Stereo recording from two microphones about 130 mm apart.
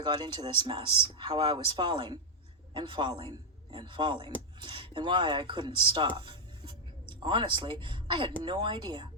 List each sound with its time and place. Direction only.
0.0 s speech: 35° right (ahead or behind)